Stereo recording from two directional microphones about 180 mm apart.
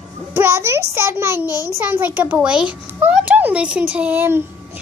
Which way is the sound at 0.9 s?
10° right (ahead or behind).